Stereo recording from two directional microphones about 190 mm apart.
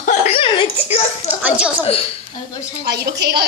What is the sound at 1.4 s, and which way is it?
Speech, 10° right (ahead or behind).